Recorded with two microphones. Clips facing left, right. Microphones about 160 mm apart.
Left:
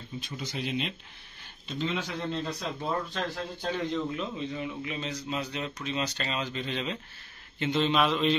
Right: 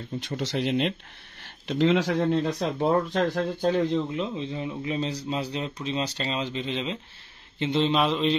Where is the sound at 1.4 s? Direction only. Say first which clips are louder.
Right 10 dB; 90° right.